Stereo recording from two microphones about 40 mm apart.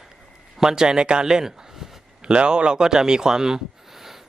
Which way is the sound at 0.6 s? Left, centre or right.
Centre.